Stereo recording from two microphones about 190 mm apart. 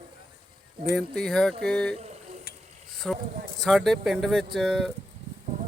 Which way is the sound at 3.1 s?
Centre (ahead or behind).